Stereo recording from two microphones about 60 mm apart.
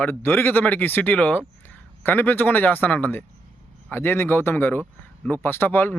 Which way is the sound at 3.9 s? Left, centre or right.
Left.